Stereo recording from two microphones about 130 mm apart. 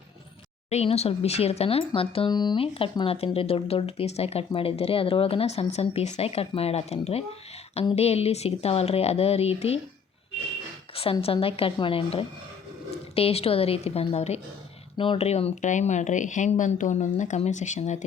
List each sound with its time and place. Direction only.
0.7 s speech: 55° left (ahead or behind)
10.9 s speech: 45° left (ahead or behind)
14.9 s speech: 40° left (ahead or behind)
15.3 s speech: 55° left (ahead or behind)
15.7 s speech: 65° left (ahead or behind)